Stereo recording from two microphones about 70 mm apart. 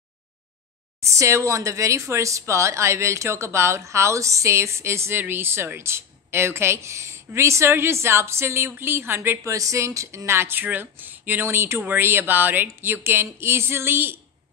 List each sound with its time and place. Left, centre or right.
1.0 s speech: right
9.5 s speech: right
11.5 s speech: right